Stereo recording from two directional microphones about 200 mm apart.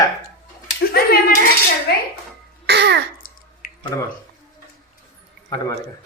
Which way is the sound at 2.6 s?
55° right (ahead or behind).